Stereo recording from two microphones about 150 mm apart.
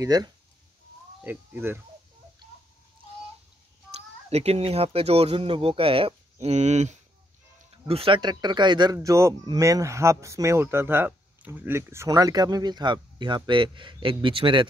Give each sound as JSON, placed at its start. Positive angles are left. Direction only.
{"t": 0.0, "sound": "speech", "side_deg": -25}
{"t": 1.2, "sound": "speech", "side_deg": -15}
{"t": 4.3, "sound": "speech", "side_deg": -45}
{"t": 7.9, "sound": "speech", "side_deg": -35}